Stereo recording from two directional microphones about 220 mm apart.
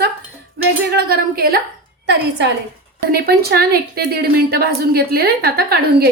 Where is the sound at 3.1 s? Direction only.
45° right (ahead or behind).